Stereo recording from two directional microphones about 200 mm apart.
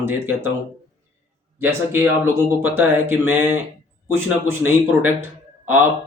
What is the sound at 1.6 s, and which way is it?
Speech, 10° right (ahead or behind).